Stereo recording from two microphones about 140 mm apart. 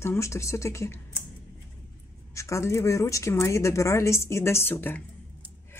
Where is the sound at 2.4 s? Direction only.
20° left (ahead or behind).